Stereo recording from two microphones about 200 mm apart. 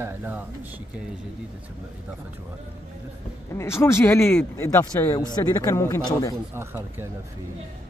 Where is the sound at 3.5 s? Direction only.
15° left (ahead or behind).